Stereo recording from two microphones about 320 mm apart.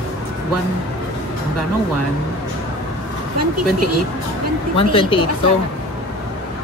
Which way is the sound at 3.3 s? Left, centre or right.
Right.